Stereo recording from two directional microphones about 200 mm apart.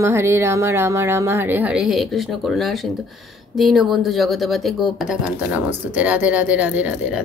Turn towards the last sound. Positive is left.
turn(degrees=-5)  # may be behind; listen again after turning